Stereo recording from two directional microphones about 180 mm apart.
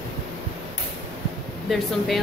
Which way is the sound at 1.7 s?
Centre (ahead or behind).